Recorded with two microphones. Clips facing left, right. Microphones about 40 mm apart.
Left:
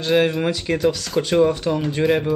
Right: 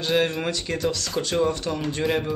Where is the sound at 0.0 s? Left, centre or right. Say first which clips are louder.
Left 5 dB; centre.